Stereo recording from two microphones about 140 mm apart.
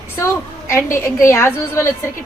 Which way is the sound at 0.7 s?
20° left (ahead or behind).